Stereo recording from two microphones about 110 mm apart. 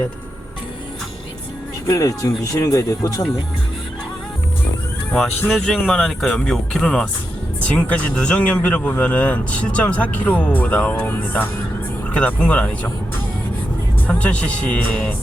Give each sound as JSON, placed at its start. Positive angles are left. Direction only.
{"t": 1.9, "sound": "speech", "side_deg": 30}
{"t": 5.5, "sound": "speech", "side_deg": 5}
{"t": 14.1, "sound": "speech", "side_deg": 10}